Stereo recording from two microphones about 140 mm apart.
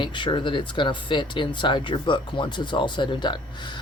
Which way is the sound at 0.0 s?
35° left (ahead or behind).